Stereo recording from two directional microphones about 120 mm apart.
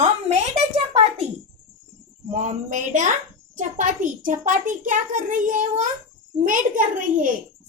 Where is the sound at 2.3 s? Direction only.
90° right.